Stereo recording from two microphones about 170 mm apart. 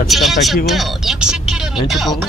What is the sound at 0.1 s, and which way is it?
Speech, centre (ahead or behind).